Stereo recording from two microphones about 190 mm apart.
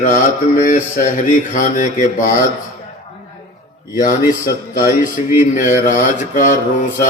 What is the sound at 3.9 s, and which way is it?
Speech, 45° left (ahead or behind).